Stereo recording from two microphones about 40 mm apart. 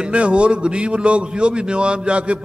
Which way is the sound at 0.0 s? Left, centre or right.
Right.